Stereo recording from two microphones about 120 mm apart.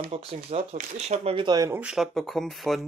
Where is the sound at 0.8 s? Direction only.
70° right (ahead or behind).